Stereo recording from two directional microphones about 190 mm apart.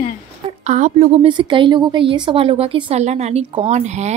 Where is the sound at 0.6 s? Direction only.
40° right (ahead or behind).